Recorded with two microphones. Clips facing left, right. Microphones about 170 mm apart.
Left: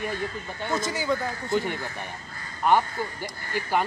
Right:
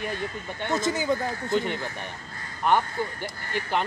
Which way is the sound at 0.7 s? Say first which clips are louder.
Right 3 dB; 20° right (ahead or behind).